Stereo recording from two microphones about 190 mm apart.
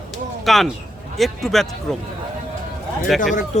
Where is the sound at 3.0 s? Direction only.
Centre (ahead or behind).